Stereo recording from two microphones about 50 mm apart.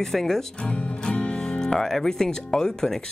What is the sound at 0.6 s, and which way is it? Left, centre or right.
Music, left.